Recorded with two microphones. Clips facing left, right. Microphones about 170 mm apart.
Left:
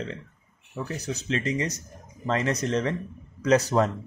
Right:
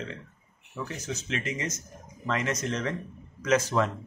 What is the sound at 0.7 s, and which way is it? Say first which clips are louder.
Speech: left 3 dB; 35° left (ahead or behind).